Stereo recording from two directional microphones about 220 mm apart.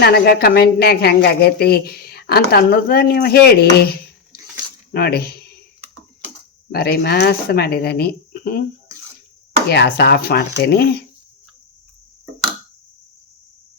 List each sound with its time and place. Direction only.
0.0 s a woman's voice: 45° left (ahead or behind)
6.7 s a woman's voice: 45° left (ahead or behind)
9.6 s a woman's voice: 50° left (ahead or behind)